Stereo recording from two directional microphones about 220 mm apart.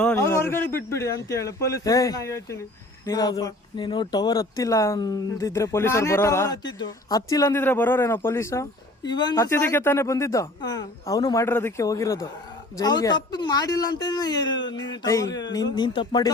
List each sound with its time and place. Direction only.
0.0 s speech: 10° left (ahead or behind)